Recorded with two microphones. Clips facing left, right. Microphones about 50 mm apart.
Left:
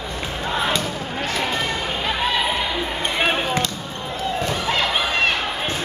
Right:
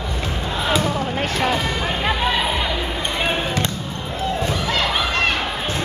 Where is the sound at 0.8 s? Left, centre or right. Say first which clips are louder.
Right 4 dB; right.